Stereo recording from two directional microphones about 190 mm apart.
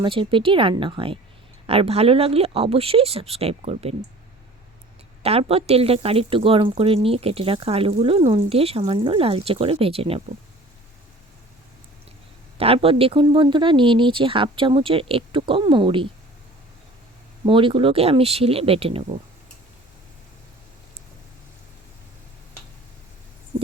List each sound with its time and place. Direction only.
0.0 s a woman's voice: 25° right (ahead or behind)
5.2 s a woman's voice: 30° right (ahead or behind)
12.5 s a woman's voice: 30° right (ahead or behind)
17.4 s a woman's voice: 25° right (ahead or behind)